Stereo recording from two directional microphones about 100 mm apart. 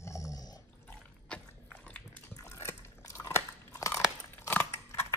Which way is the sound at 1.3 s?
10° left (ahead or behind).